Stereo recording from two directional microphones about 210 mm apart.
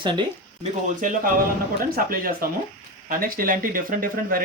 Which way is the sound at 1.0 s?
40° right (ahead or behind).